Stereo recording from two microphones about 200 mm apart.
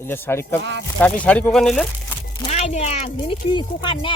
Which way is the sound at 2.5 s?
35° left (ahead or behind).